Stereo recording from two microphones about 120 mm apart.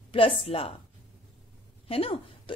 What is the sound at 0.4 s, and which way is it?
Speech, 50° left (ahead or behind).